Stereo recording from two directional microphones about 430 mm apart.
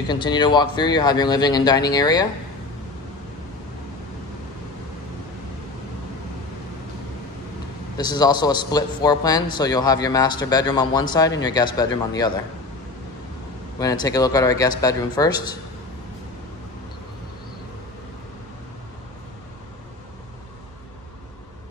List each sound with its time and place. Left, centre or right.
0.1 s a man's voice: centre
8.0 s a man's voice: centre
13.7 s a man's voice: centre